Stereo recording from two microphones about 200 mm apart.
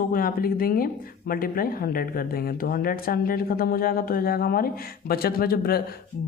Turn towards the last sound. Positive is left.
turn(degrees=50)  # may be behind; listen again after turning